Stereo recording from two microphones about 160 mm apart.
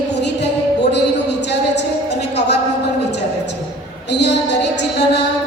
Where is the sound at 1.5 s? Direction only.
90° left.